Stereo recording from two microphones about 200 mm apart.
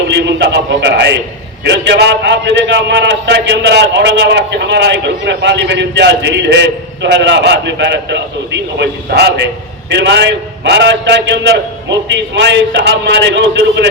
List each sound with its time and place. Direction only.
0.1 s a man's voice: 60° right (ahead or behind)